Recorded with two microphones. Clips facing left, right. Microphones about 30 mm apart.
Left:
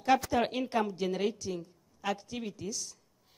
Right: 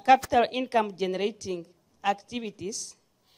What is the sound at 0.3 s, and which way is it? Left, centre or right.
A woman's voice, right.